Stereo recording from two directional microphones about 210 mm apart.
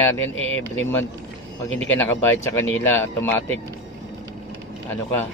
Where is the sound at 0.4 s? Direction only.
30° right (ahead or behind).